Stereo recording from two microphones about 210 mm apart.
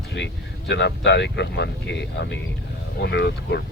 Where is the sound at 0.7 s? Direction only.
55° left (ahead or behind).